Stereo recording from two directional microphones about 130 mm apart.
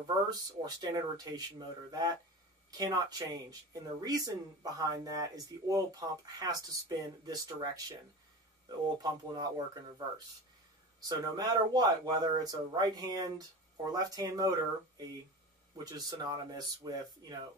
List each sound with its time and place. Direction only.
0.0 s speech: 30° right (ahead or behind)
11.0 s speech: 30° right (ahead or behind)